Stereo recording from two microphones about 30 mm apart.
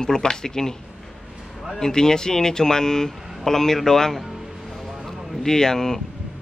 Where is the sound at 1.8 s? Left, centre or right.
Centre.